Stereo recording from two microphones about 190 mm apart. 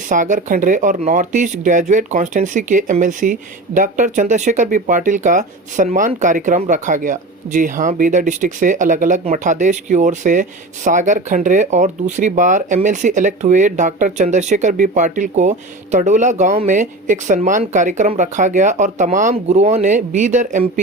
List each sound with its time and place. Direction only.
0.1 s speech: 45° right (ahead or behind)